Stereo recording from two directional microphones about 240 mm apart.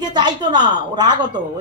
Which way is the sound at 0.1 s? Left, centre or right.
Centre.